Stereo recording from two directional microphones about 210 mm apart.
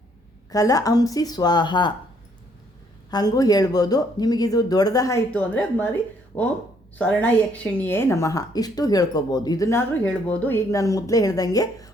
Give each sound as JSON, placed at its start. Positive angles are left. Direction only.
{"t": 0.5, "sound": "speech", "side_deg": 15}
{"t": 3.1, "sound": "speech", "side_deg": 20}